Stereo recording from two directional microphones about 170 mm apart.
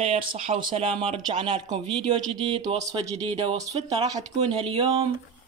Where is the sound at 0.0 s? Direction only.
35° right (ahead or behind).